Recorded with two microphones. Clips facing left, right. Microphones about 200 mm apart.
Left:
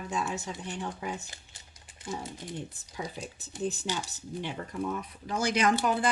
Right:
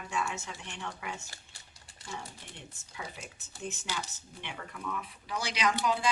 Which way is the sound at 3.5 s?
20° left (ahead or behind).